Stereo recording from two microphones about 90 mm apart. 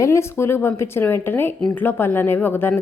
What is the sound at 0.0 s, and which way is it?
Speech, 30° left (ahead or behind).